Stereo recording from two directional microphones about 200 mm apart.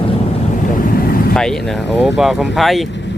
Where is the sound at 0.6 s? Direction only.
45° left (ahead or behind).